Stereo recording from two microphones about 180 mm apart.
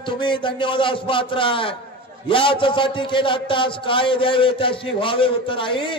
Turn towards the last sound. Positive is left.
turn(degrees=30)  # may be behind; listen again after turning